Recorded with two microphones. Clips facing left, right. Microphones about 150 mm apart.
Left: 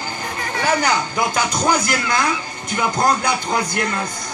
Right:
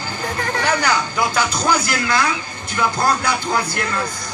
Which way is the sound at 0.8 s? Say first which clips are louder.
Even; 20° left (ahead or behind).